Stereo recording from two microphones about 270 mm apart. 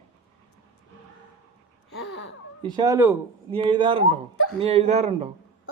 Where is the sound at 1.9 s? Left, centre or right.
Left.